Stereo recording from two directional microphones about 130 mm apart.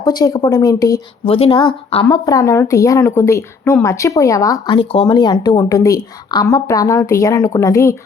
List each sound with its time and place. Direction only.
0.0 s speech: 30° left (ahead or behind)
1.2 s speech: 45° left (ahead or behind)
2.0 s speech: 30° left (ahead or behind)
4.7 s speech: 45° left (ahead or behind); by 7.9 s 25° left (ahead or behind)